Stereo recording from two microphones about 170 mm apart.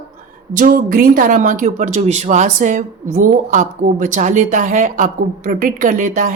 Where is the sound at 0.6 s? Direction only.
55° right (ahead or behind).